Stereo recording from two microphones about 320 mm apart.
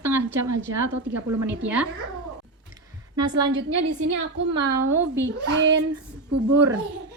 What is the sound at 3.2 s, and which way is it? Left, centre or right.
Speech, centre.